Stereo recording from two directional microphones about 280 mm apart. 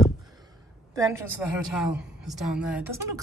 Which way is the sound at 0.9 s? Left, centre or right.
Centre.